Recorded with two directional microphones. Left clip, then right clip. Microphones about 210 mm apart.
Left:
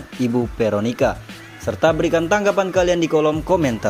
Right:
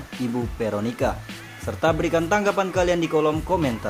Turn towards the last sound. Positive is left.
turn(degrees=25)  # may be behind; listen again after turning